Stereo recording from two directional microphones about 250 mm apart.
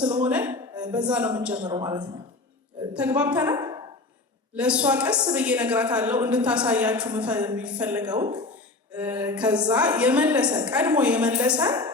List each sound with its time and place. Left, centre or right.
0.0 s a woman's voice: centre
1.5 s a woman's voice: centre
2.9 s a woman's voice: centre
8.1 s speech: centre
8.9 s a woman's voice: centre